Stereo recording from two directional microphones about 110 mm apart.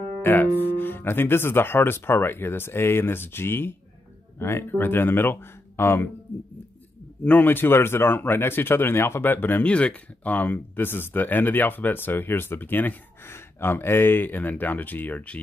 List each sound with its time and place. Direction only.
0.2 s speech: 20° left (ahead or behind)
7.2 s speech: 15° left (ahead or behind)